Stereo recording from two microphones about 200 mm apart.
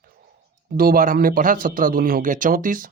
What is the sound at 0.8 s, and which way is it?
Speech, 45° right (ahead or behind).